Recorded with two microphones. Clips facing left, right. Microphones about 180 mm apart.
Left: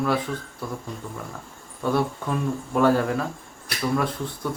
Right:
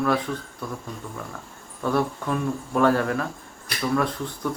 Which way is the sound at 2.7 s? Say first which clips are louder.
Left 1 dB; 20° left (ahead or behind).